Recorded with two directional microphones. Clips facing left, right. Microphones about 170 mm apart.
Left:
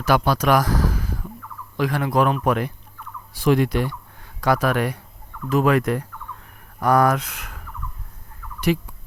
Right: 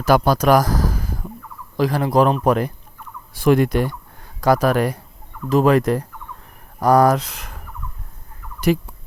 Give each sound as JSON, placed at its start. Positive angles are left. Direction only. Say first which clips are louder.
{"t": 0.0, "sound": "speech", "louder": "right 4 dB", "side_deg": -40}
{"t": 3.3, "sound": "turkey", "louder": "right 3 dB", "side_deg": -50}
{"t": 4.4, "sound": "speech", "louder": "right 4 dB", "side_deg": -40}